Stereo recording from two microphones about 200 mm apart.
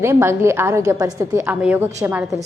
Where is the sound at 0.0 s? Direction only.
15° right (ahead or behind).